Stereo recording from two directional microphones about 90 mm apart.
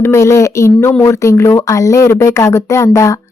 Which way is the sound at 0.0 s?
30° left (ahead or behind).